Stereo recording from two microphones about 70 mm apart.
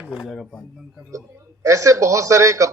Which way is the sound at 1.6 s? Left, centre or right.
Right.